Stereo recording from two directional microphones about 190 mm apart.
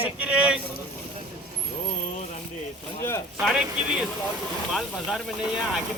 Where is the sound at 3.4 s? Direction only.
5° right (ahead or behind).